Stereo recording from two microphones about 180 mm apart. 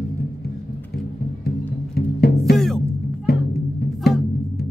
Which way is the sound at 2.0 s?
60° left (ahead or behind).